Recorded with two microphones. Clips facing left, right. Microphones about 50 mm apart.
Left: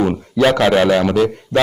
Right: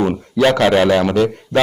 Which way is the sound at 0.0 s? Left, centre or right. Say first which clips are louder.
Even; centre.